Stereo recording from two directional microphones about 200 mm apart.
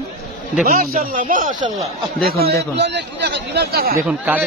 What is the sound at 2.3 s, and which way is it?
A man's voice, 50° right (ahead or behind).